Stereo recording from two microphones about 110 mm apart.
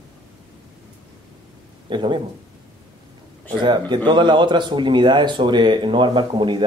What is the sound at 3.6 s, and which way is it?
Speech, 45° right (ahead or behind).